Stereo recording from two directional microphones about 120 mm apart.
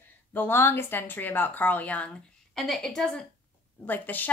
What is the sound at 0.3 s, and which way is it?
A woman's voice, 20° left (ahead or behind).